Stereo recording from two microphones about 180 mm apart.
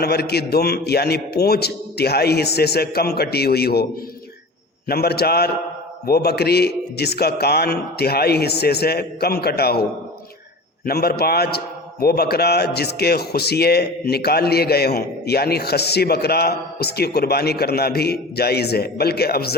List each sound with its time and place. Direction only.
0.0 s a man's voice: 65° left (ahead or behind)
4.9 s a man's voice: 60° left (ahead or behind)
10.8 s a man's voice: 60° left (ahead or behind)